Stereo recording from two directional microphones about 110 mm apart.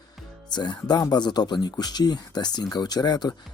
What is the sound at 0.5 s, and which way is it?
Speech, 40° left (ahead or behind).